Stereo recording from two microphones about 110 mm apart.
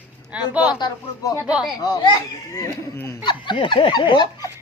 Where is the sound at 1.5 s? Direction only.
10° right (ahead or behind).